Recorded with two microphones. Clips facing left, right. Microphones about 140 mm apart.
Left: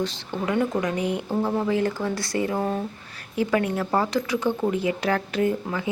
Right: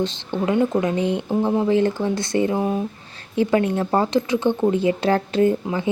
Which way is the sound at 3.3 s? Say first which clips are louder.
Right 4 dB; 25° right (ahead or behind).